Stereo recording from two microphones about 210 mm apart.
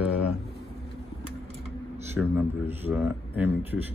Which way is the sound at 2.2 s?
10° right (ahead or behind).